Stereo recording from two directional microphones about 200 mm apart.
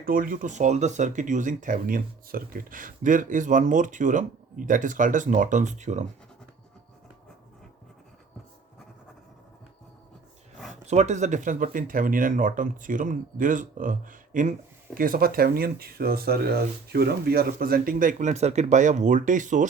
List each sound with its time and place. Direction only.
0.0 s speech: 45° right (ahead or behind)
10.8 s speech: 35° right (ahead or behind)